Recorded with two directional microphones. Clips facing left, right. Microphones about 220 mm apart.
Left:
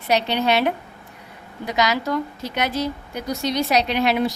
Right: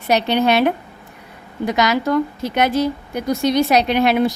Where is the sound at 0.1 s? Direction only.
50° right (ahead or behind).